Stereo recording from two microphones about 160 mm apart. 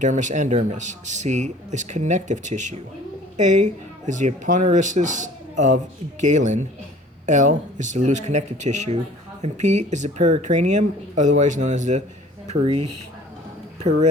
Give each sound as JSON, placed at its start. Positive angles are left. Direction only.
{"t": 0.0, "sound": "speech", "side_deg": -50}